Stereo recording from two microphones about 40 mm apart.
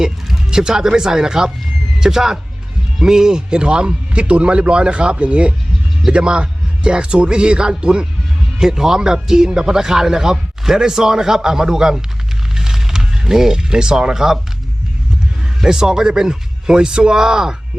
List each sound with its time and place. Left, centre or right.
0.0 s a man's voice: centre
12.5 s a sound: centre
15.6 s speech: centre